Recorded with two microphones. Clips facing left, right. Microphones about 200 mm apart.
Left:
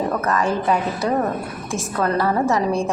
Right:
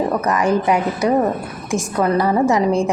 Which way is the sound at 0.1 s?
15° right (ahead or behind).